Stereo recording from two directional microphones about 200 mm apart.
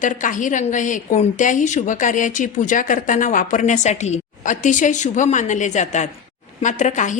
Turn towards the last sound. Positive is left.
turn(degrees=40)  # may be behind; listen again after turning